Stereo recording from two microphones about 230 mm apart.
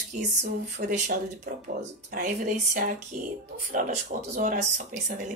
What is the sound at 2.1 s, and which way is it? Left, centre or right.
A woman's voice, right.